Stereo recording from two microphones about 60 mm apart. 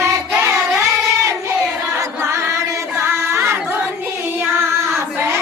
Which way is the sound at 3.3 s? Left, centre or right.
Right.